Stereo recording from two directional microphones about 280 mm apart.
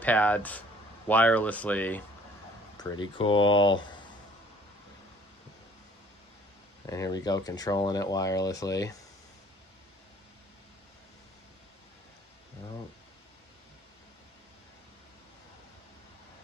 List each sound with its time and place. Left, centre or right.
0.0 s speech: centre
6.9 s speech: centre